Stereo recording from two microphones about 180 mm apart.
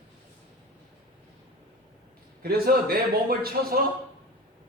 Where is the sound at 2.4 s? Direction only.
55° right (ahead or behind).